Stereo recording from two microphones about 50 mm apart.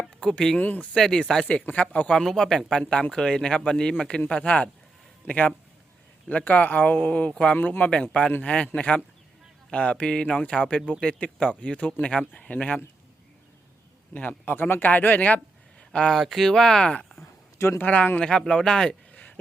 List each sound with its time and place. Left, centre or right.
0.0 s a sound: centre
0.6 s speech: left
0.9 s speech: centre
1.7 s speech: left
2.2 s speech: centre
4.3 s a man's voice: left
7.5 s speech: left
14.1 s speech: left
15.9 s speech: centre
16.1 s speech: centre
17.7 s speech: left
18.3 s speech: centre